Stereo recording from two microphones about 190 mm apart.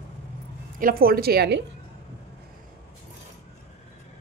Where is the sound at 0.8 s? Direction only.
50° right (ahead or behind).